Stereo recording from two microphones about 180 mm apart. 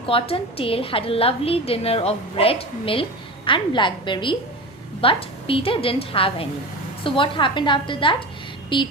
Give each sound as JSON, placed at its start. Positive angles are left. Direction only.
{"t": 0.0, "sound": "a woman's voice", "side_deg": 30}